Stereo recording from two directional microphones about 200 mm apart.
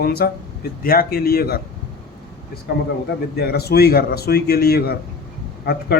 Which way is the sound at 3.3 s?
50° left (ahead or behind).